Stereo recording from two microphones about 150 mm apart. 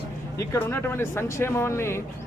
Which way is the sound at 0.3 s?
20° left (ahead or behind).